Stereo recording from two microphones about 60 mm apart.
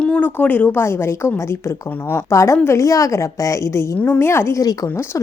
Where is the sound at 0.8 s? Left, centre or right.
Left.